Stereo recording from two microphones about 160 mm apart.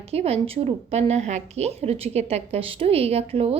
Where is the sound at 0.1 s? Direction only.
40° right (ahead or behind).